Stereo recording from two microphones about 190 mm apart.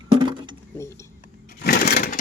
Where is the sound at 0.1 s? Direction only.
25° right (ahead or behind).